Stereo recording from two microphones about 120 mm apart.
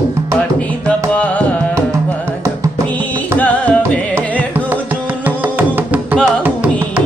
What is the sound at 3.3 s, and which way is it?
Music, 10° left (ahead or behind).